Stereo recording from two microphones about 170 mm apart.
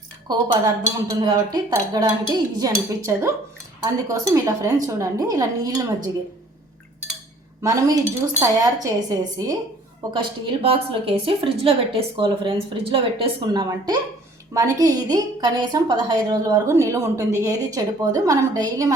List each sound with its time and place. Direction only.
0.3 s a woman's voice: 25° right (ahead or behind)
7.6 s a woman's voice: 20° right (ahead or behind)